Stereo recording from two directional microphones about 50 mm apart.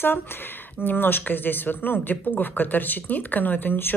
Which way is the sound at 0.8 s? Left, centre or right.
Left.